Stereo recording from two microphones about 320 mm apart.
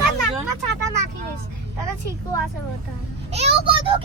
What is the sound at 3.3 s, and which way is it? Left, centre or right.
Speech, centre.